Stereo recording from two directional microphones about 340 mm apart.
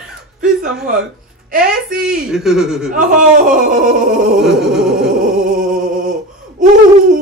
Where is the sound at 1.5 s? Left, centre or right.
Right.